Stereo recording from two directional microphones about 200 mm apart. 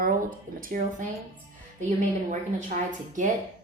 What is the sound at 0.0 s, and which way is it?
Speech, 45° right (ahead or behind).